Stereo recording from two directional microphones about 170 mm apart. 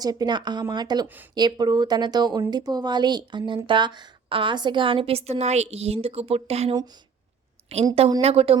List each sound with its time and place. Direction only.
0.0 s speech: 25° right (ahead or behind)